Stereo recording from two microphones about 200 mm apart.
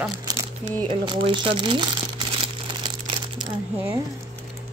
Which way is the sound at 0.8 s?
25° right (ahead or behind).